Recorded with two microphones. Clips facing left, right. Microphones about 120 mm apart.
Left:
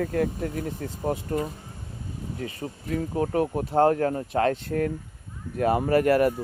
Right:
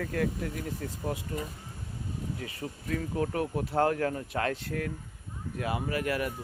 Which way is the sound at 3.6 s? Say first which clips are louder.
Left 6 dB; 20° left (ahead or behind).